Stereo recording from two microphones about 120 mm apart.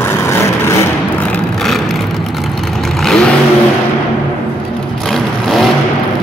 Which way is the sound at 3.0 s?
5° left (ahead or behind).